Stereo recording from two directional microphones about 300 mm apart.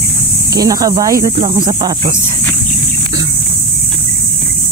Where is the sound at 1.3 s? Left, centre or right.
Right.